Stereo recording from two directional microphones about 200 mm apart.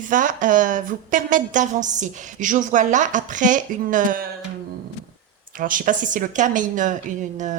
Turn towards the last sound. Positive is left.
turn(degrees=-40)  # may be behind; listen again after turning